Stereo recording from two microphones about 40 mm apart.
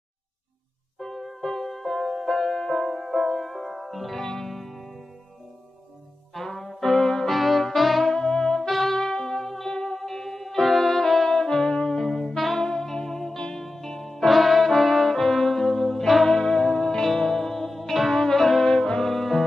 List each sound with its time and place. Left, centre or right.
0.9 s music: centre
3.0 s music: centre
4.2 s music: centre
6.3 s brass instrument: centre
7.3 s brass instrument: centre
8.1 s music: centre
8.6 s music: centre
8.9 s music: centre
13.7 s brass instrument: centre
16.3 s music: centre
18.2 s saxophone: centre